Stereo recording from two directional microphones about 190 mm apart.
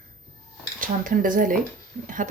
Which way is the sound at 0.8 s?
45° right (ahead or behind).